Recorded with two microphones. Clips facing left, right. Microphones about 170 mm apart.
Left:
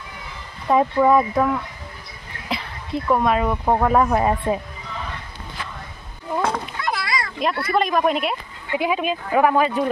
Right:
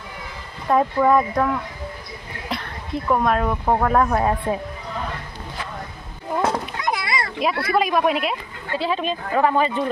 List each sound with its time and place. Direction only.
0.7 s speech: 5° left (ahead or behind)
6.4 s a sound: 20° right (ahead or behind)
7.4 s speech: 5° right (ahead or behind)
8.7 s speech: 10° left (ahead or behind)